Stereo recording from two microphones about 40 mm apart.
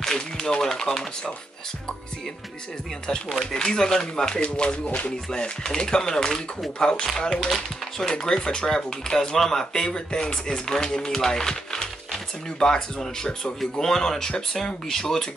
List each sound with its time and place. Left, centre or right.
0.0 s speech: centre
3.5 s speech: centre
4.4 s speech: left; by 15.2 s centre